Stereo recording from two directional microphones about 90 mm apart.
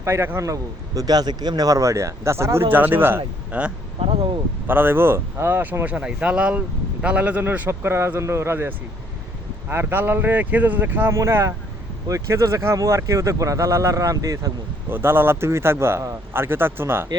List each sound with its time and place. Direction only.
0.0 s a man's voice: 30° right (ahead or behind)
4.0 s speech: 90° right
4.6 s a man's voice: 25° right (ahead or behind)
5.9 s a man's voice: 10° right (ahead or behind); by 14.5 s 40° right (ahead or behind)
14.8 s a man's voice: 25° right (ahead or behind)